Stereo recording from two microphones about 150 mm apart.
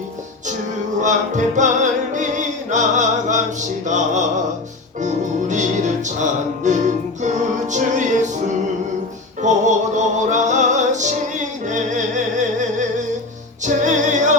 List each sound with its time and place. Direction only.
1.0 s music: 55° right (ahead or behind)
13.7 s music: 55° right (ahead or behind)